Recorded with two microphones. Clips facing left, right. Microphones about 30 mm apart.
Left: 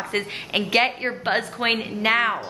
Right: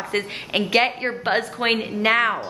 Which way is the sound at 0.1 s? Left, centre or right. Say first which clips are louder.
Right 2 dB; centre.